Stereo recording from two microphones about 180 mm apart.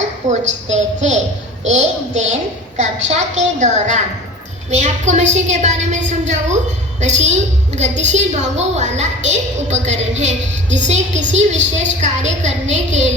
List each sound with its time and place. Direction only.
0.4 s a woman's voice: 40° right (ahead or behind)